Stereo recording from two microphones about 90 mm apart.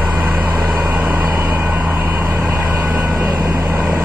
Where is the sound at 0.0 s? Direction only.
15° right (ahead or behind).